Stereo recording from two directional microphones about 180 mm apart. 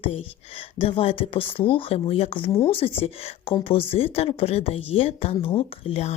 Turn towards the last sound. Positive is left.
turn(degrees=35)  # may be behind; listen again after turning